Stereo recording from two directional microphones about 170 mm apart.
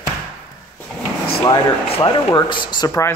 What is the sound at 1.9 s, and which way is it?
Speech, 30° left (ahead or behind).